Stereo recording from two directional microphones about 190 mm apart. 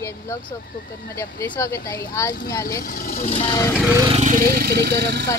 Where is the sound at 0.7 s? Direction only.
50° left (ahead or behind).